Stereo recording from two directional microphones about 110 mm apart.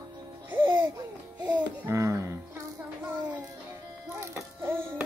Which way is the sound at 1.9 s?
30° right (ahead or behind).